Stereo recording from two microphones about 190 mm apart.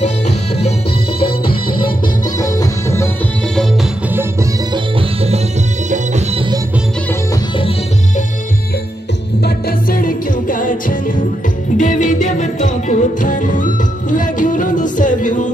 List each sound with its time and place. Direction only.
1.2 s music: 30° left (ahead or behind)
4.1 s music: 10° right (ahead or behind)
5.9 s music: 35° right (ahead or behind)
9.4 s music: 50° left (ahead or behind)